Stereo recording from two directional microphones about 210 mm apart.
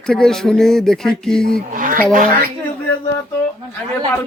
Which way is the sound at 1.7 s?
40° right (ahead or behind).